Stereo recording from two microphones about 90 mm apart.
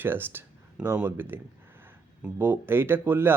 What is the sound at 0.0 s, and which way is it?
Speech, 25° right (ahead or behind).